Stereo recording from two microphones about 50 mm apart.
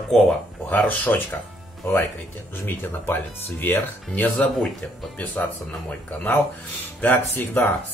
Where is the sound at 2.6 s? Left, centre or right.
Left.